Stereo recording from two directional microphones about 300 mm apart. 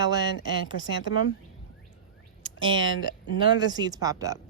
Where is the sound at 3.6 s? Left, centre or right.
Centre.